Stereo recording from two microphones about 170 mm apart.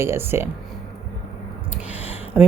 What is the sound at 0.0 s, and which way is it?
Speech, 15° right (ahead or behind).